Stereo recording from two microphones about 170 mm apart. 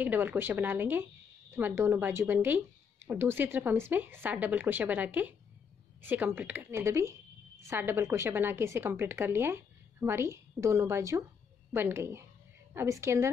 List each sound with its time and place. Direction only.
0.0 s a woman's voice: 10° right (ahead or behind)